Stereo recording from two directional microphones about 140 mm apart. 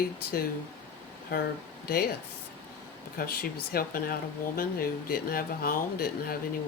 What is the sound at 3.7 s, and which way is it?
Speech, 90° left.